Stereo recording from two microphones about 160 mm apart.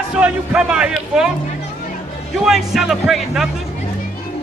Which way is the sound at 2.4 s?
Centre (ahead or behind).